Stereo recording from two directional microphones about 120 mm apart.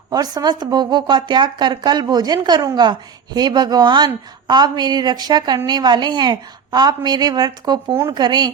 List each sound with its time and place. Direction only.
0.1 s speech: 35° right (ahead or behind)